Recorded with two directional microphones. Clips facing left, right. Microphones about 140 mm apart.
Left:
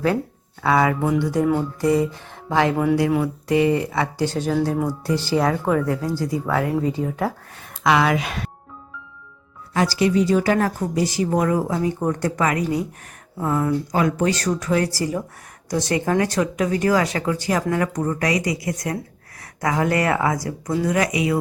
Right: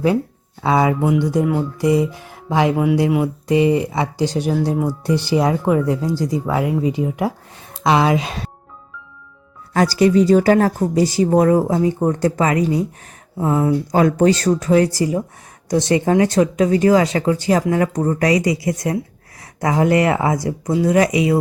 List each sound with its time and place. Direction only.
0.6 s speech: 20° right (ahead or behind)
9.7 s speech: 40° right (ahead or behind); by 21.3 s 25° right (ahead or behind)